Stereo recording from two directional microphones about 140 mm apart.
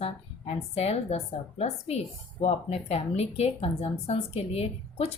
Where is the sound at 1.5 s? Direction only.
50° left (ahead or behind).